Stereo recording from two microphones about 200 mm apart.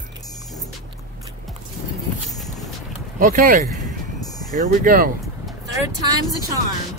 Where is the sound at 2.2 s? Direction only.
Centre (ahead or behind).